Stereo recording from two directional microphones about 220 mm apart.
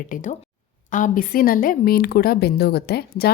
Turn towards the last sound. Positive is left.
turn(degrees=45)  # may be behind; listen again after turning